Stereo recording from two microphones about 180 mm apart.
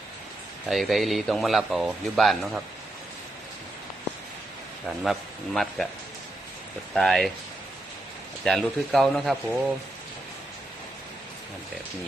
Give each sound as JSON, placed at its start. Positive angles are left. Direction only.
{"t": 0.7, "sound": "speech", "side_deg": 0}
{"t": 5.5, "sound": "speech", "side_deg": 0}
{"t": 6.9, "sound": "speech", "side_deg": 0}
{"t": 8.4, "sound": "speech", "side_deg": 0}